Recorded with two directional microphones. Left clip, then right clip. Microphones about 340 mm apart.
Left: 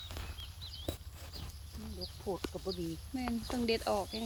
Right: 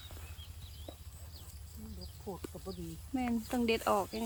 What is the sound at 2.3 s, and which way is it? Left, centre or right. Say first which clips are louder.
Speech: left 6 dB; left.